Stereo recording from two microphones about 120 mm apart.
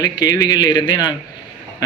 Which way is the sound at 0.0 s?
30° left (ahead or behind).